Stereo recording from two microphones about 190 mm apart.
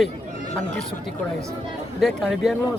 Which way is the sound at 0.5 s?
5° left (ahead or behind).